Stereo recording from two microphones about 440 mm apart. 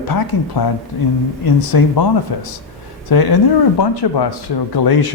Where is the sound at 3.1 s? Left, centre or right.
Left.